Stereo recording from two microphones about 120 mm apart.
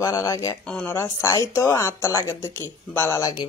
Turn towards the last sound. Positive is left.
turn(degrees=25)  # may be behind; listen again after turning